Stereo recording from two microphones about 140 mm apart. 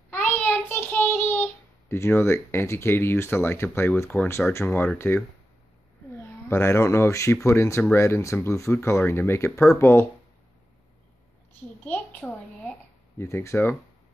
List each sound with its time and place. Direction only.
0.1 s child singing: 10° left (ahead or behind)
6.5 s speech: 20° left (ahead or behind)
11.8 s speech: 10° left (ahead or behind)